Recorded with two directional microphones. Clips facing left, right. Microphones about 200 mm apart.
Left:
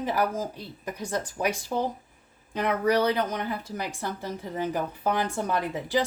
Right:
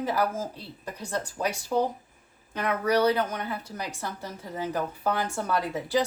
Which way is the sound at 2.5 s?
15° left (ahead or behind).